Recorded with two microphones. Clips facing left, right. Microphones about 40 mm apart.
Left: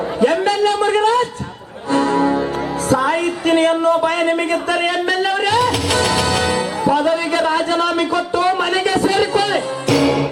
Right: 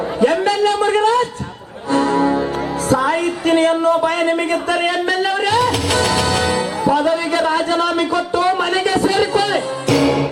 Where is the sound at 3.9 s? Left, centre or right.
Left.